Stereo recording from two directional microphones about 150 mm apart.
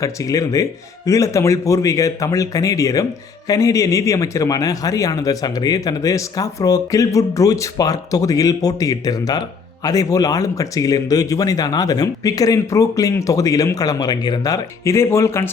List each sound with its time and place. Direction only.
0.0 s speech: 20° left (ahead or behind)